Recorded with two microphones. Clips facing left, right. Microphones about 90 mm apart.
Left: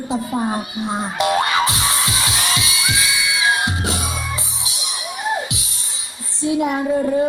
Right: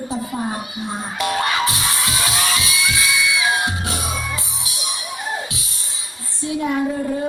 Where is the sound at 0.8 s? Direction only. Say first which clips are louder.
Left 4 dB; 25° left (ahead or behind).